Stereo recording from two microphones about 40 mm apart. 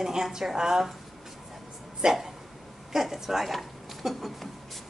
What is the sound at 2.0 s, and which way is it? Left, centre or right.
Speech, centre.